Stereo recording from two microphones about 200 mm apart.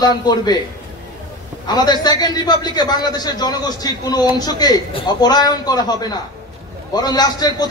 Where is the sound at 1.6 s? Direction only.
20° left (ahead or behind).